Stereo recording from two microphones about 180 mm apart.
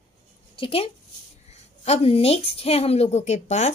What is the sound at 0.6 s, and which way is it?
A woman's voice, 30° left (ahead or behind).